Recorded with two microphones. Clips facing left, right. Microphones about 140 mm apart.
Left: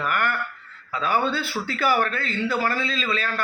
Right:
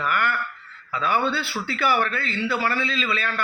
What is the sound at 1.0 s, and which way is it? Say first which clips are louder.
A man's voice: even; 45° left (ahead or behind).